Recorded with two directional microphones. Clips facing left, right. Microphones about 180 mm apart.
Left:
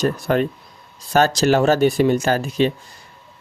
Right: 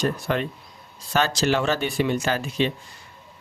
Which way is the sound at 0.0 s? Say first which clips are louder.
Left 6 dB; 45° left (ahead or behind).